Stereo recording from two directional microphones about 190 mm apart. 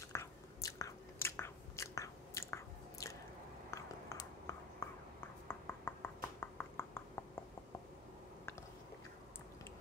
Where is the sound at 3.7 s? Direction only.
15° left (ahead or behind).